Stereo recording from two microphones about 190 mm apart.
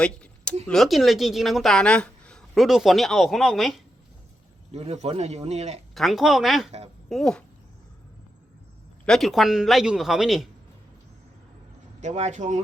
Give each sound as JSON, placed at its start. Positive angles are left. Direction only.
{"t": 0.0, "sound": "a sound", "side_deg": 5}
{"t": 0.7, "sound": "speech", "side_deg": 0}
{"t": 4.7, "sound": "speech", "side_deg": -35}
{"t": 5.9, "sound": "speech", "side_deg": 0}
{"t": 6.7, "sound": "speech", "side_deg": -35}
{"t": 7.1, "sound": "speech", "side_deg": 5}
{"t": 9.0, "sound": "speech", "side_deg": 0}
{"t": 11.9, "sound": "speech", "side_deg": -40}